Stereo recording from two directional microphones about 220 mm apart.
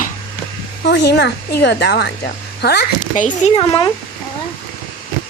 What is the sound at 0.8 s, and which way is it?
Speech, 50° left (ahead or behind).